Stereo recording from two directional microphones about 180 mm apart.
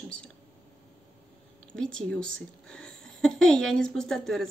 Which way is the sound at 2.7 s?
5° left (ahead or behind).